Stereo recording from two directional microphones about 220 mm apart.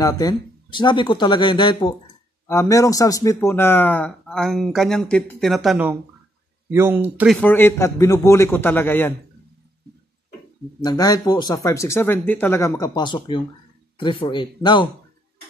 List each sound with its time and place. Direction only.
0.0 s speech: 15° left (ahead or behind); by 7.3 s 10° right (ahead or behind)
7.3 s speech: 10° left (ahead or behind)
10.8 s speech: 15° left (ahead or behind)